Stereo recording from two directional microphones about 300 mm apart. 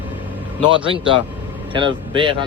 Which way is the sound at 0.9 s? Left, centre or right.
Centre.